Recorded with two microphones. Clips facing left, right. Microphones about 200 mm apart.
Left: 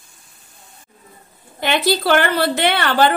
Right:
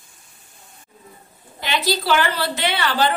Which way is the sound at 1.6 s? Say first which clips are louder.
Left 5 dB; 55° left (ahead or behind).